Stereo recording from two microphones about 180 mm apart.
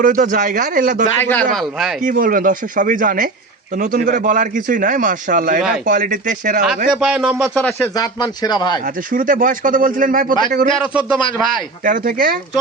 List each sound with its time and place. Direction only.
0.0 s a man's voice: 45° right (ahead or behind)
1.2 s speech: 10° left (ahead or behind)
2.0 s a man's voice: 50° right (ahead or behind)
6.9 s speech: 5° right (ahead or behind)
7.9 s speech: 20° left (ahead or behind)
9.1 s a man's voice: 50° right (ahead or behind)
11.9 s a man's voice: 55° right (ahead or behind)